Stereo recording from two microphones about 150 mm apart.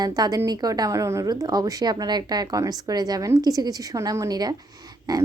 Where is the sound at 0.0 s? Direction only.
25° right (ahead or behind).